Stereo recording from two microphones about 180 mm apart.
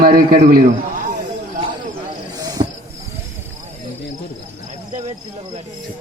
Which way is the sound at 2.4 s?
20° right (ahead or behind).